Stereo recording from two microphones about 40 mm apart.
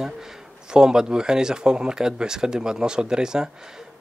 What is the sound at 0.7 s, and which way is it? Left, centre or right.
Speech, centre.